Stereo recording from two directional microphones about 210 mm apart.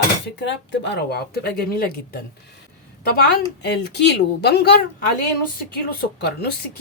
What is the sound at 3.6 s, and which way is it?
Speech, 50° left (ahead or behind).